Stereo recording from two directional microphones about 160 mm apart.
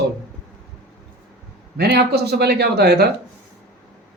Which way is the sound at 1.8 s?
90° right.